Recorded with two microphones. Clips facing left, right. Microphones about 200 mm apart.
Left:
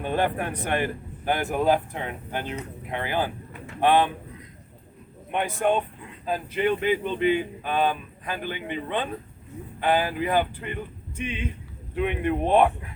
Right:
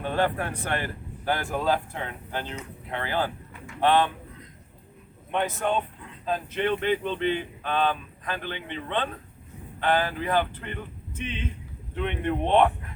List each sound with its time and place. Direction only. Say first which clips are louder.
0.0 s speech: left 1 dB; 15° left (ahead or behind)
5.3 s speech: left 2 dB; 10° left (ahead or behind)